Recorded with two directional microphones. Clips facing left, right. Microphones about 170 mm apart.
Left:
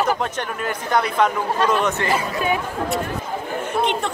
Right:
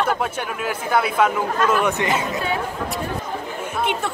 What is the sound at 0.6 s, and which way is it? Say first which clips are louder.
Speech: even; 5° right (ahead or behind).